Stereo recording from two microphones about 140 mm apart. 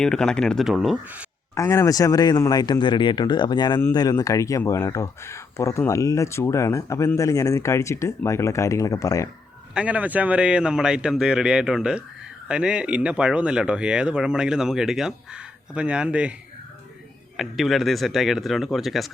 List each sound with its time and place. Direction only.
0.0 s speech: 5° left (ahead or behind); by 1.3 s 10° right (ahead or behind)
1.5 s speech: 20° left (ahead or behind)
9.7 s speech: 10° right (ahead or behind)
17.3 s speech: centre (ahead or behind)